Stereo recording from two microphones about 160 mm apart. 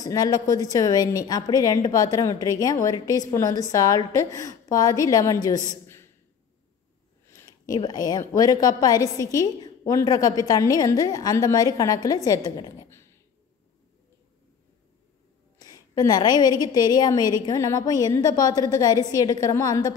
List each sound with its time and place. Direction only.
0.0 s a woman's voice: 20° left (ahead or behind)
7.2 s a woman's voice: 20° left (ahead or behind)
12.3 s a sound: 25° left (ahead or behind)
15.6 s a woman's voice: 20° left (ahead or behind)